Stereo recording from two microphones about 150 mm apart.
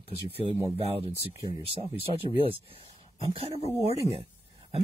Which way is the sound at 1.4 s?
40° right (ahead or behind).